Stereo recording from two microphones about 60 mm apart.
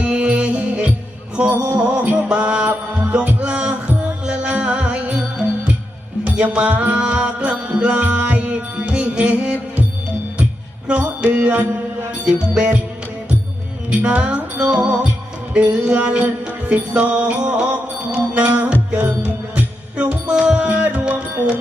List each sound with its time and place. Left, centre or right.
0.0 s music: right
6.4 s music: right
10.8 s music: right
14.0 s music: right
21.0 s music: centre